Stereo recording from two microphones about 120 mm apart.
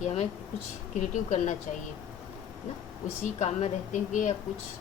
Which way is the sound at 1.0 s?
85° left.